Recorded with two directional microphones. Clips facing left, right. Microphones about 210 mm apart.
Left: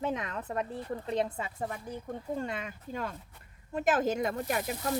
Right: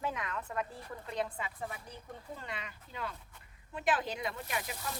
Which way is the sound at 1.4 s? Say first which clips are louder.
Left 6 dB; 45° left (ahead or behind).